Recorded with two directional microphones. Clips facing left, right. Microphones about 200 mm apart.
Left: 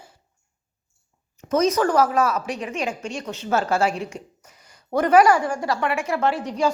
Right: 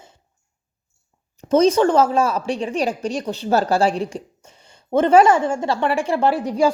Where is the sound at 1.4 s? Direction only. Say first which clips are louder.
Right 5 dB; 30° right (ahead or behind).